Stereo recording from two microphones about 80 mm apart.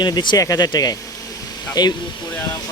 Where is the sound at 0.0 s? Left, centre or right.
Left.